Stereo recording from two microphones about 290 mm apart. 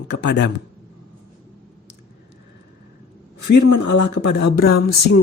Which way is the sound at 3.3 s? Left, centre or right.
Left.